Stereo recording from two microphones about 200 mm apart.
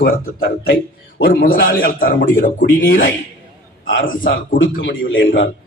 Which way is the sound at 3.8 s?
70° left (ahead or behind).